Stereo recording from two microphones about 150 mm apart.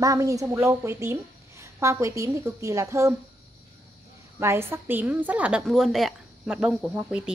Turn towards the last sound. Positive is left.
turn(degrees=-10)  # may be behind; listen again after turning